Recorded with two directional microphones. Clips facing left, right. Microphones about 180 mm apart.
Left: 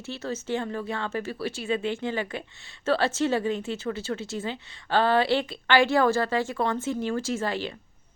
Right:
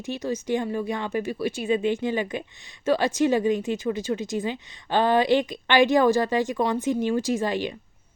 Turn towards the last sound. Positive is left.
turn(degrees=-15)  # may be behind; listen again after turning